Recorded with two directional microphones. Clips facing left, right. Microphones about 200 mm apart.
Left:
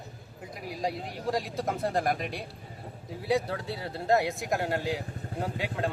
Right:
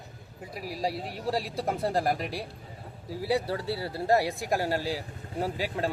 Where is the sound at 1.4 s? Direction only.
30° right (ahead or behind).